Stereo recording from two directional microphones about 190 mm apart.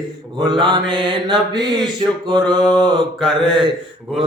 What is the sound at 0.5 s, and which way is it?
Mantra, 25° right (ahead or behind).